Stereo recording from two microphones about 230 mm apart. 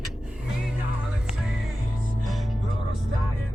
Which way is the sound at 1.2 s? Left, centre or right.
Centre.